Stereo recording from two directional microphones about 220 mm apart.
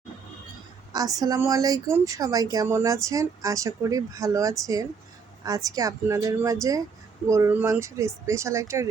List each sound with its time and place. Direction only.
0.9 s speech: 15° right (ahead or behind)